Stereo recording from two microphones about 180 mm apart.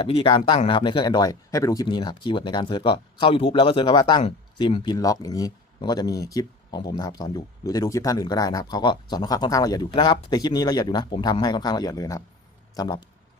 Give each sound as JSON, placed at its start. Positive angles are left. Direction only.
{"t": 0.0, "sound": "speech", "side_deg": 30}